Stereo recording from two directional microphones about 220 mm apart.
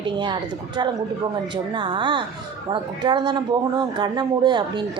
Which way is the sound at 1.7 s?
20° right (ahead or behind).